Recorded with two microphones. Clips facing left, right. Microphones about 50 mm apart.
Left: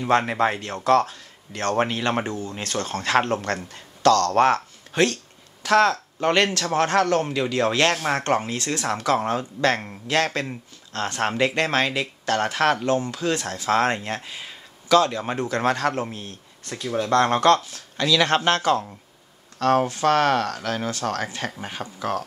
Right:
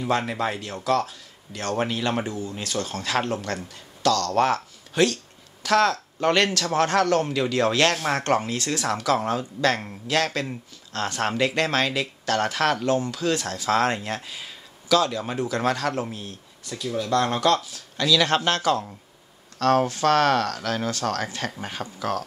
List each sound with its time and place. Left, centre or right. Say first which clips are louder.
0.2 s speech: left 4 dB; left
0.6 s speech: left 4 dB; left
2.2 s speech: left 1 dB; left
14.9 s speech: left 3 dB; left
18.0 s speech: left 1 dB; left
19.6 s speech: left 1 dB; left
21.5 s speech: even; centre
21.8 s speech: left 1 dB; left